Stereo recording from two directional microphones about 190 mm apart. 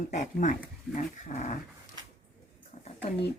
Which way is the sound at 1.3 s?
45° left (ahead or behind).